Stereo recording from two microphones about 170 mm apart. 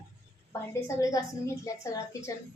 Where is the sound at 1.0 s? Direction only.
20° left (ahead or behind).